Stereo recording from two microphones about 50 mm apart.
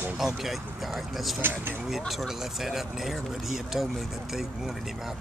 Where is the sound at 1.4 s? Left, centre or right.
Right.